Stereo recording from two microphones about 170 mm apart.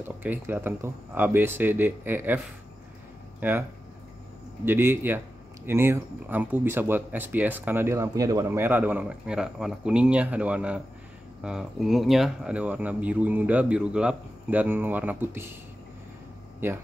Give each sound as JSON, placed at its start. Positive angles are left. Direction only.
{"t": 0.0, "sound": "speech", "side_deg": -10}
{"t": 4.6, "sound": "speech", "side_deg": -15}